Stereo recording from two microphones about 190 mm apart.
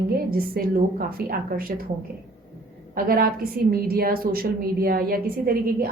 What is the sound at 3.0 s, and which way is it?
A woman's voice, 50° right (ahead or behind).